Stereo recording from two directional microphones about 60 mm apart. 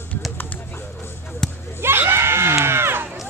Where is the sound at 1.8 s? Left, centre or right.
Right.